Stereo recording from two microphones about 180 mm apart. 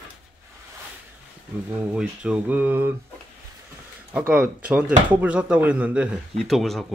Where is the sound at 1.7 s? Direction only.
5° right (ahead or behind).